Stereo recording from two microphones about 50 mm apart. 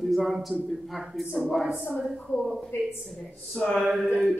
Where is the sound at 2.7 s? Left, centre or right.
Left.